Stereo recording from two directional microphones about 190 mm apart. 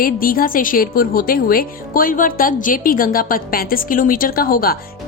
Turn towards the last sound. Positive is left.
turn(degrees=50)  # may be behind; listen again after turning